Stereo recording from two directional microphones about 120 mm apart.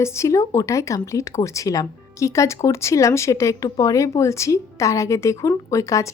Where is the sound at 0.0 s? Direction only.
25° left (ahead or behind).